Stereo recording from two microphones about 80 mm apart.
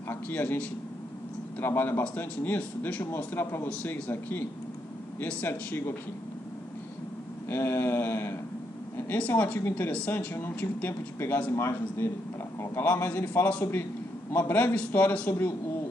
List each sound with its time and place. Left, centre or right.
0.1 s a man's voice: left
7.4 s a man's voice: left
9.6 s speech: left
9.8 s a man's voice: centre